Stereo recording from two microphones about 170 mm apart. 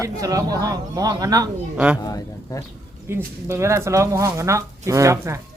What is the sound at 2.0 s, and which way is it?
Speech, 20° left (ahead or behind).